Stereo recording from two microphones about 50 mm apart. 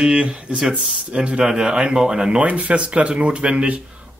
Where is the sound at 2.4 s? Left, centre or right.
Right.